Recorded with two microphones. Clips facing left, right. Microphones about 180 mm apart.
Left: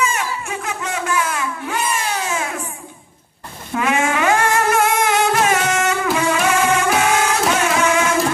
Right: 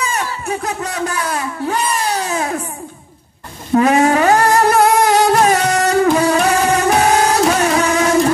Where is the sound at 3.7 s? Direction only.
35° right (ahead or behind).